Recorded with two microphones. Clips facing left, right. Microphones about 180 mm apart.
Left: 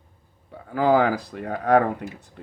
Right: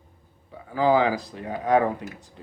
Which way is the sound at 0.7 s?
55° left (ahead or behind).